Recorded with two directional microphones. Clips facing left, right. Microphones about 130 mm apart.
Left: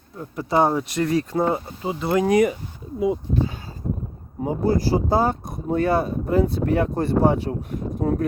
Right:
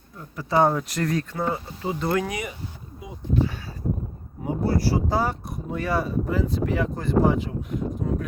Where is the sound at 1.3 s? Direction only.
25° left (ahead or behind).